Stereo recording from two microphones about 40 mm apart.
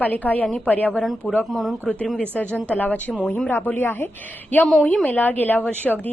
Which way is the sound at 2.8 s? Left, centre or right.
Left.